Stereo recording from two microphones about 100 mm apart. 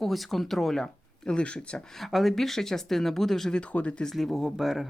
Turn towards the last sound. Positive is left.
turn(degrees=0)  # may be behind; listen again after turning